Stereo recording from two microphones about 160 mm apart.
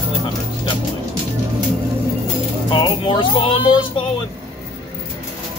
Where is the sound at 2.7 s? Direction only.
30° left (ahead or behind).